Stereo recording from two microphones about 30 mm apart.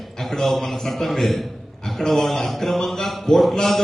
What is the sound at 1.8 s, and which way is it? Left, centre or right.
A man's voice, centre.